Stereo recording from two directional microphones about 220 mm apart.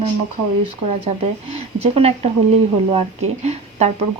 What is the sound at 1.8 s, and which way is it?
Speech, 30° right (ahead or behind).